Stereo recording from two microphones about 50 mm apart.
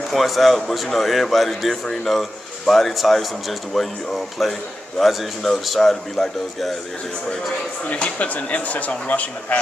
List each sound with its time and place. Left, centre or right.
0.1 s a man's voice: centre
7.9 s speech: left